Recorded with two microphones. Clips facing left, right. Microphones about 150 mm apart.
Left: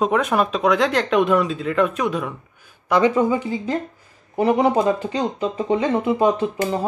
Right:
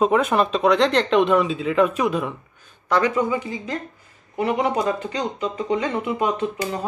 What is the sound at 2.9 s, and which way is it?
Speech, 15° left (ahead or behind).